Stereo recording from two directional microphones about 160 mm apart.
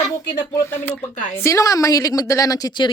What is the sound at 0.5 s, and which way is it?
Speech, 15° left (ahead or behind).